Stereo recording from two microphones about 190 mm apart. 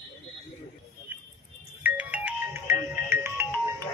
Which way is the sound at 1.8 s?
10° right (ahead or behind).